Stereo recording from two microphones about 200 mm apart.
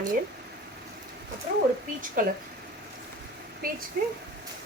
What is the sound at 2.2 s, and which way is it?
Speech, 45° right (ahead or behind).